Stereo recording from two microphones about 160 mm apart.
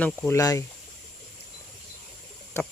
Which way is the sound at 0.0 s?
15° left (ahead or behind).